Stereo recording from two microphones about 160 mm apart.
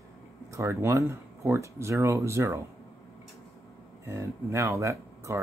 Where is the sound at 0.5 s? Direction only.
15° right (ahead or behind).